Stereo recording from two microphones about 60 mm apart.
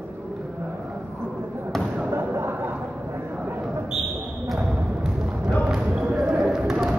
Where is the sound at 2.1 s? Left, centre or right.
Right.